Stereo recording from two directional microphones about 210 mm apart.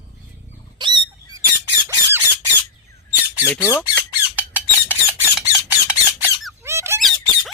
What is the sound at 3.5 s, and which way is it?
Speech, 10° left (ahead or behind).